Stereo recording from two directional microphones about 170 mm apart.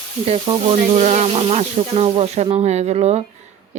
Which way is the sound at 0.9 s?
45° right (ahead or behind).